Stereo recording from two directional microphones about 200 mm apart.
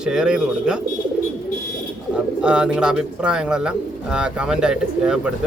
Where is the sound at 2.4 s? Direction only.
5° right (ahead or behind).